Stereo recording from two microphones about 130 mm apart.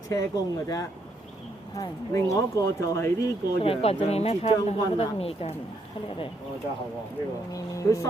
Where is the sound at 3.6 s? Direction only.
50° left (ahead or behind).